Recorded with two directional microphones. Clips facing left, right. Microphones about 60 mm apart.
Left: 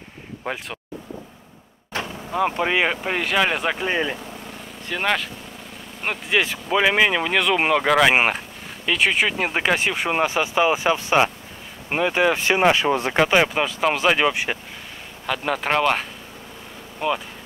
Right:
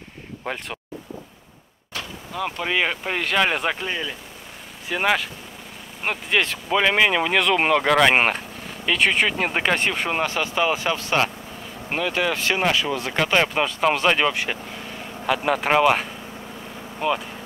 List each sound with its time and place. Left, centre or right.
0.4 s speech: centre
2.0 s speech: left; by 3.7 s centre
3.9 s speech: left
4.8 s speech: centre; by 13.1 s left
13.1 s speech: centre
14.3 s speech: centre
15.2 s speech: centre